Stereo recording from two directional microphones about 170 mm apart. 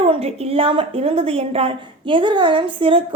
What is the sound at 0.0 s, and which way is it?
A woman's voice, 35° right (ahead or behind).